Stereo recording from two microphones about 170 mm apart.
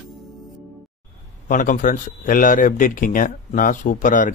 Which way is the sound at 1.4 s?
50° left (ahead or behind).